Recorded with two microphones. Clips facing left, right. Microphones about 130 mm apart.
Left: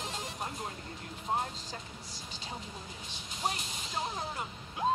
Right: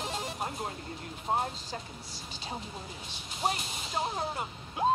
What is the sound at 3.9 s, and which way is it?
Speech, 35° right (ahead or behind).